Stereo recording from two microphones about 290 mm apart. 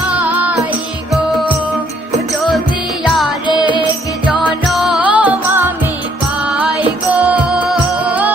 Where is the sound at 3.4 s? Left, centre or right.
Centre.